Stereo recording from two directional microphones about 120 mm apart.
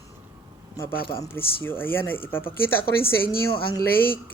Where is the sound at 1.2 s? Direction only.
20° left (ahead or behind).